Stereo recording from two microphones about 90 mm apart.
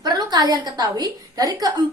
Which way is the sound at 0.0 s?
50° right (ahead or behind).